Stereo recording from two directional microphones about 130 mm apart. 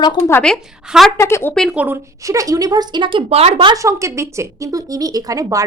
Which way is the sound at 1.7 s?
10° right (ahead or behind).